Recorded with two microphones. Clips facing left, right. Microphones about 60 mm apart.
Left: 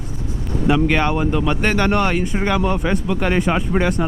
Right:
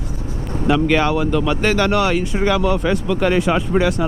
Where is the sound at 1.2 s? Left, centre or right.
Centre.